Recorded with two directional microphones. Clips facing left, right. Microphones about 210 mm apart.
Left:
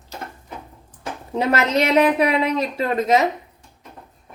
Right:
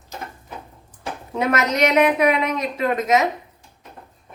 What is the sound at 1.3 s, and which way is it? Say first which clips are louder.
A woman's voice: left 2 dB; 30° left (ahead or behind).